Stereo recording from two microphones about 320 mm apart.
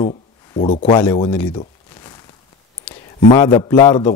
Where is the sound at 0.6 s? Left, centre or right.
Centre.